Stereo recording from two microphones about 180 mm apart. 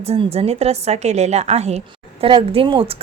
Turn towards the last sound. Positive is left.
turn(degrees=-30)  # may be behind; listen again after turning